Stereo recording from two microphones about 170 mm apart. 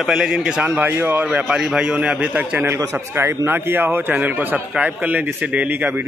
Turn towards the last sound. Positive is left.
turn(degrees=-10)  # may be behind; listen again after turning